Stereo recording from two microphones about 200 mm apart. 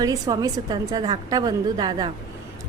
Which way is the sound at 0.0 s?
20° right (ahead or behind).